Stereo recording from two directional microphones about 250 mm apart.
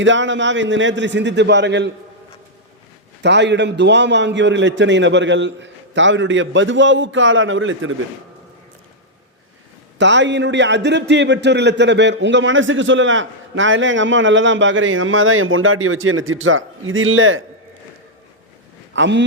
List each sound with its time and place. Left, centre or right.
0.0 s a man's voice: right
3.2 s a man's voice: right
10.0 s a man's voice: right
18.9 s a man's voice: right